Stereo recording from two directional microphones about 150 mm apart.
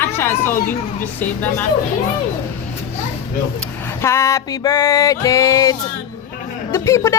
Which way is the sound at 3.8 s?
15° left (ahead or behind).